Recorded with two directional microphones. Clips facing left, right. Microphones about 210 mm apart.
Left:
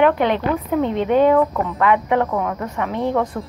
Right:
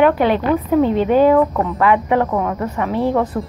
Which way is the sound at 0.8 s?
35° right (ahead or behind).